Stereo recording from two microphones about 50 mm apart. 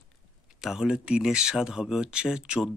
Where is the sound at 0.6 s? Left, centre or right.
Centre.